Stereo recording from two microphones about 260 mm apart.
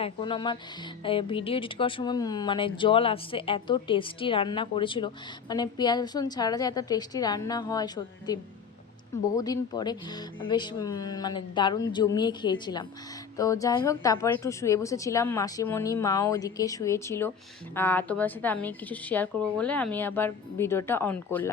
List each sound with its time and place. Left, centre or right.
0.0 s music: centre
1.0 s speech: centre